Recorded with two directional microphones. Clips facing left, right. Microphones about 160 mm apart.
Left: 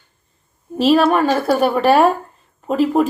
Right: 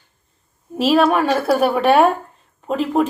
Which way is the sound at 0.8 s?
Centre (ahead or behind).